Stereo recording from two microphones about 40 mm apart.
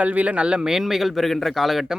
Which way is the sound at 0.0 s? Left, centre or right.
Right.